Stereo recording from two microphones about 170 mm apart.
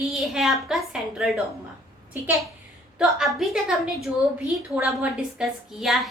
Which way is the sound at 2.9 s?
Centre (ahead or behind).